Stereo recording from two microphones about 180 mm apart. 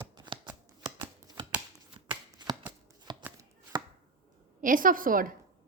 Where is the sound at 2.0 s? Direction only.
30° right (ahead or behind).